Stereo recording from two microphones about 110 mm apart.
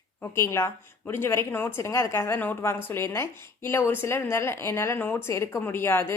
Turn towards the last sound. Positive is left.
turn(degrees=20)  # may be behind; listen again after turning